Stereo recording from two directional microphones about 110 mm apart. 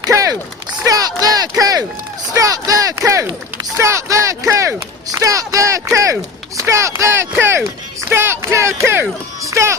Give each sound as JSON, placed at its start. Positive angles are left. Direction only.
{"t": 0.0, "sound": "run", "side_deg": -30}
{"t": 0.7, "sound": "a sound", "side_deg": -35}
{"t": 2.3, "sound": "a child's voice", "side_deg": -30}